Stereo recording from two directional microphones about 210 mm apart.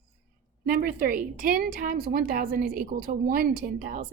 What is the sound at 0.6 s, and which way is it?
A woman's voice, 45° right (ahead or behind).